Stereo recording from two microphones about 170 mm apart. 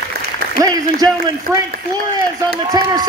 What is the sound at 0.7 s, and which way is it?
Speech, 25° right (ahead or behind).